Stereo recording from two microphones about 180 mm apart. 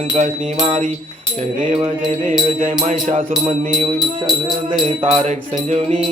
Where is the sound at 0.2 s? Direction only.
40° right (ahead or behind).